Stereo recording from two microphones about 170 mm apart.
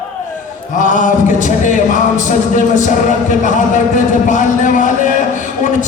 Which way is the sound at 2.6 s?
45° left (ahead or behind).